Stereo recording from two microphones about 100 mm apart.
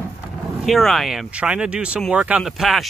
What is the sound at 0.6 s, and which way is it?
Speech, centre (ahead or behind).